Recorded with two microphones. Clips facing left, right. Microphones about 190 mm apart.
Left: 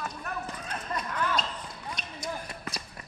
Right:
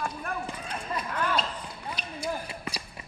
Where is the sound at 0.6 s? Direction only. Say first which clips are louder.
Even; 10° right (ahead or behind).